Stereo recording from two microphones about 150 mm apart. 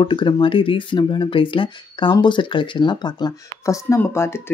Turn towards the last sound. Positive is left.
turn(degrees=20)  # may be behind; listen again after turning